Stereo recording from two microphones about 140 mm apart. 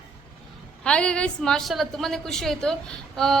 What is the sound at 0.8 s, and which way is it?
A woman's voice, 5° left (ahead or behind).